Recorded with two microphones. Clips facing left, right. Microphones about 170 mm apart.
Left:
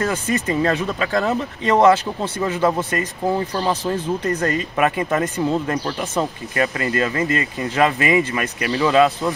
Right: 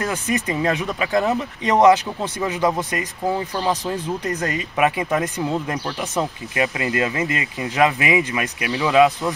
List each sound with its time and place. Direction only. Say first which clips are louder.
0.0 s speech: left 2 dB; 15° right (ahead or behind)
6.1 s speech: left 1 dB; 15° right (ahead or behind)